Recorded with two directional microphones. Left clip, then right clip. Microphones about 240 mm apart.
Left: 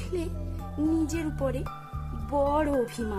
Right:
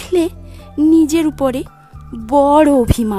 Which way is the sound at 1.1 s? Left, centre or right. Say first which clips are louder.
Right 15 dB; right.